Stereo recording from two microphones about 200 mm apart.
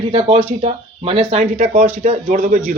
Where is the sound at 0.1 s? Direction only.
30° right (ahead or behind).